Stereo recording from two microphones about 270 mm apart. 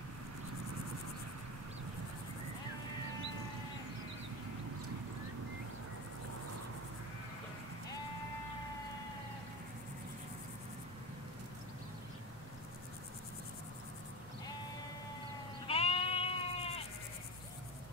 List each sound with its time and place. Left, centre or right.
15.6 s sheep: left